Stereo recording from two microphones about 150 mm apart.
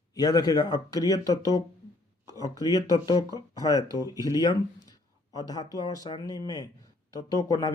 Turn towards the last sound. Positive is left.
turn(degrees=25)  # may be behind; listen again after turning